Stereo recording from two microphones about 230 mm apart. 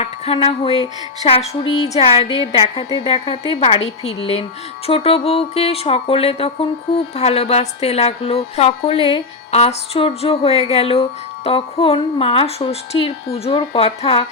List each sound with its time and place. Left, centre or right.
0.0 s speech: left